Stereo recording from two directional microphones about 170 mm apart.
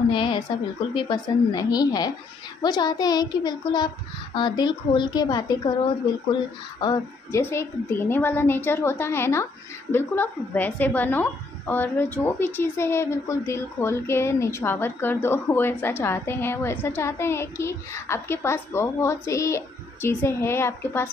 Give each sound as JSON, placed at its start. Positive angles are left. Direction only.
{"t": 0.1, "sound": "a child's voice", "side_deg": 30}